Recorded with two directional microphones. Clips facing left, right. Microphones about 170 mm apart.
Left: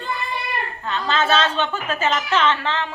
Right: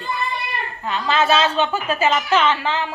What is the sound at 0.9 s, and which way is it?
A woman's voice, 10° right (ahead or behind).